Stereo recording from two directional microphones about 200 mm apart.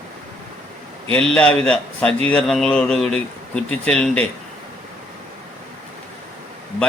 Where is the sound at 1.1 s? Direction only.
5° left (ahead or behind).